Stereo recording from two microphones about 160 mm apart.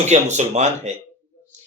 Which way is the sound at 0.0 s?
45° right (ahead or behind).